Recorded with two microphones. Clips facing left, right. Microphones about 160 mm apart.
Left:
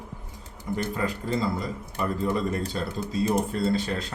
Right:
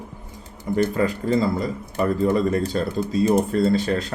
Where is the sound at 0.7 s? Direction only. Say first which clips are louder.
Right 8 dB; 80° right.